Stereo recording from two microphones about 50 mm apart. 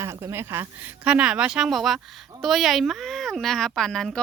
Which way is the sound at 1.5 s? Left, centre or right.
Centre.